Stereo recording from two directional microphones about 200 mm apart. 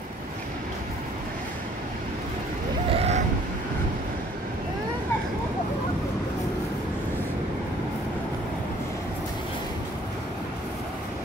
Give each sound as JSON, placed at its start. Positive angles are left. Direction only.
{"t": 2.9, "sound": "vehicle", "side_deg": -30}